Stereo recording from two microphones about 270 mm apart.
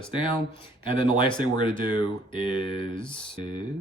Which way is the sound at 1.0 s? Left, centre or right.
Centre.